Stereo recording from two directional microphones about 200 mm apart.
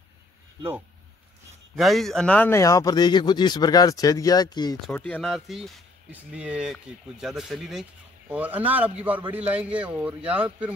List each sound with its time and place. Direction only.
1.8 s speech: centre (ahead or behind); by 4.7 s 20° left (ahead or behind)
4.9 s a man's voice: 5° left (ahead or behind)